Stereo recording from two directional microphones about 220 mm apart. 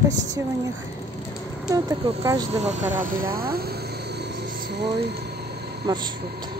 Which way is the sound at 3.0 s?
40° right (ahead or behind).